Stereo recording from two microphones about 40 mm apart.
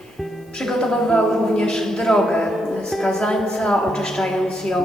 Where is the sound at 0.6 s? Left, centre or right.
Centre.